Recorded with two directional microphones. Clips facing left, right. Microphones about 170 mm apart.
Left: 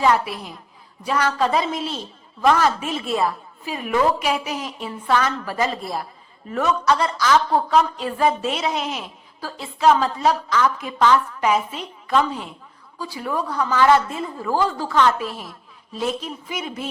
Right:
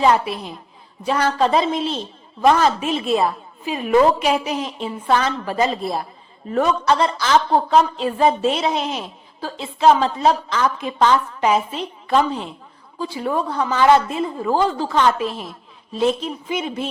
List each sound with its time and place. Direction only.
0.0 s a woman's voice: 25° right (ahead or behind)